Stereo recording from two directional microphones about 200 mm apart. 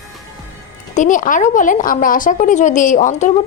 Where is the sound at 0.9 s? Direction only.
40° left (ahead or behind).